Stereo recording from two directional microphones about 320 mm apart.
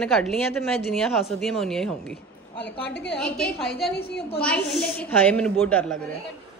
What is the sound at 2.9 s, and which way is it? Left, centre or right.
Speech, left.